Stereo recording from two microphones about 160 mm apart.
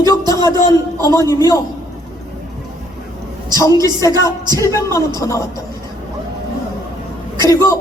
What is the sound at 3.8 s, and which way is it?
A woman's voice, 20° left (ahead or behind).